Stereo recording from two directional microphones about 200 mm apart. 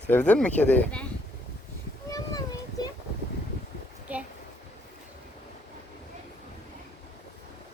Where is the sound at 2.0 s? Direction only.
15° left (ahead or behind).